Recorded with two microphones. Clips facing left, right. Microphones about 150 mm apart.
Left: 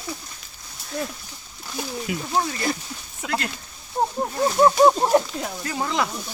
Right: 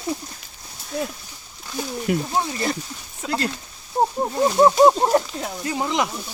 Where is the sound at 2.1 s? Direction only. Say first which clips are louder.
Right 9 dB; 50° right (ahead or behind).